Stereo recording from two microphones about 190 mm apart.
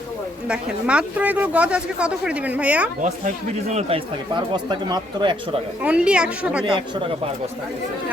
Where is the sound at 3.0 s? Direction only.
40° right (ahead or behind); by 5.3 s 25° right (ahead or behind).